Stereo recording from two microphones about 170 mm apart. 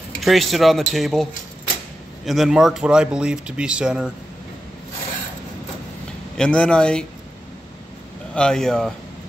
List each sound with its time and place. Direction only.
0.2 s speech: centre (ahead or behind)
6.3 s speech: 5° left (ahead or behind)
8.4 s speech: 5° left (ahead or behind)